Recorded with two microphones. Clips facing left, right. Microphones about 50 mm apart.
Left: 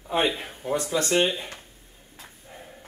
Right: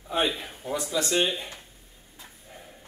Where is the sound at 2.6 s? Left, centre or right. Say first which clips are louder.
Left 3 dB; centre.